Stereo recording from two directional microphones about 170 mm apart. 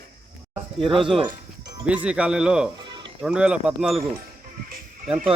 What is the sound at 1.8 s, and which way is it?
Speech, 5° right (ahead or behind).